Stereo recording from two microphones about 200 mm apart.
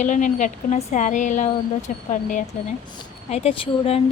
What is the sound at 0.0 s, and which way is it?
A woman's voice, 40° left (ahead or behind).